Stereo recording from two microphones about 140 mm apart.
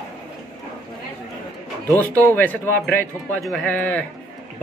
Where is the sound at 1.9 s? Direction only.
15° left (ahead or behind).